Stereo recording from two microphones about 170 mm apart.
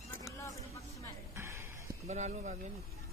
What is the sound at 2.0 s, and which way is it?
Speech, 45° right (ahead or behind).